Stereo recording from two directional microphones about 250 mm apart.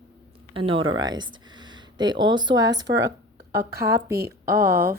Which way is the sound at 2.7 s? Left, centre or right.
Right.